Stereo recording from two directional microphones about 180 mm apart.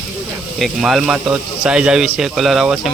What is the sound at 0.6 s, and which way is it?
Speech, centre (ahead or behind).